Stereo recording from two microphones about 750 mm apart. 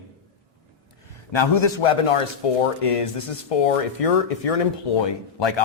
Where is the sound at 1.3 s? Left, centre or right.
Left.